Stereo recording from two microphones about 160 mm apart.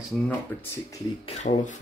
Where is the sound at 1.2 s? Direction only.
45° left (ahead or behind).